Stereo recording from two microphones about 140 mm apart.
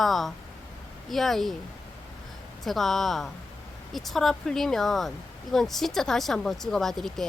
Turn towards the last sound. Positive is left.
turn(degrees=0)  # may be behind; listen again after turning